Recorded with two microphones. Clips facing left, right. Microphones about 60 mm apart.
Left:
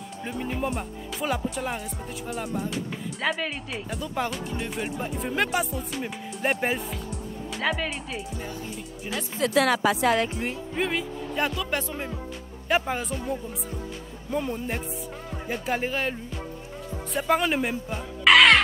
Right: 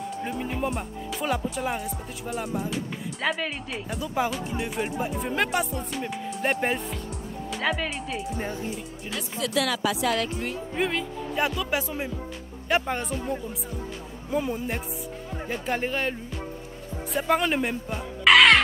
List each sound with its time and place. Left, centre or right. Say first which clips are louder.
0.2 s speech: left 1 dB; centre
9.6 s speech: left 4 dB; left
10.8 s speech: even; centre